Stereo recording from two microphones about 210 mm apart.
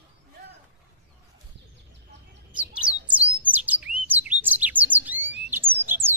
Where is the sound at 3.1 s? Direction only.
5° right (ahead or behind).